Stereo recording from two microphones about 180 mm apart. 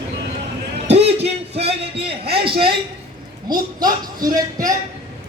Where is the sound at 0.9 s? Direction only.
35° right (ahead or behind).